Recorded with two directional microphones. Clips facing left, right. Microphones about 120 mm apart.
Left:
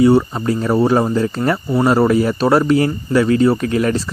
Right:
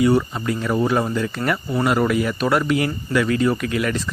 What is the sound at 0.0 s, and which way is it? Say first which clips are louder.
Speech: left 5 dB; 30° left (ahead or behind).